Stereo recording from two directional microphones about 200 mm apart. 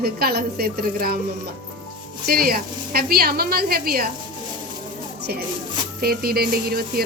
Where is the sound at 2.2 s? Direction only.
50° right (ahead or behind).